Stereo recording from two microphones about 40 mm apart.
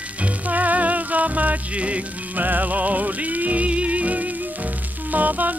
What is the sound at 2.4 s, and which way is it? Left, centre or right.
Music, right.